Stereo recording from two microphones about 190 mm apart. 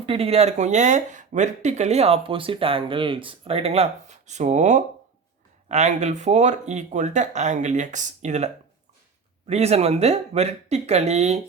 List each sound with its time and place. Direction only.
0.0 s speech: 30° right (ahead or behind)
9.5 s speech: 35° right (ahead or behind)